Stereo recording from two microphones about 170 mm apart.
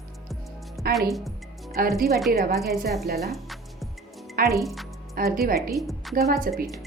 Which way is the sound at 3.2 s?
Centre (ahead or behind).